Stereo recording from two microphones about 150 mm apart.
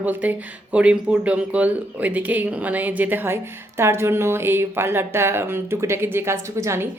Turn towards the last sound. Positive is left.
turn(degrees=-20)  # may be behind; listen again after turning